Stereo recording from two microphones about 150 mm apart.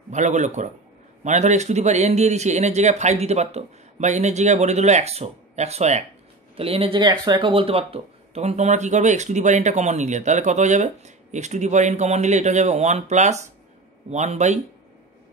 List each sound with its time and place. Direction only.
0.1 s a man's voice: 50° right (ahead or behind)